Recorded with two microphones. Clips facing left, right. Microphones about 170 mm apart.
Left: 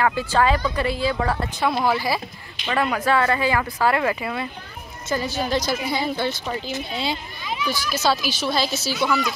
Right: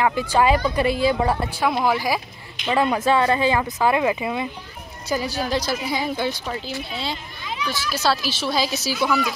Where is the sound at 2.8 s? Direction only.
25° right (ahead or behind).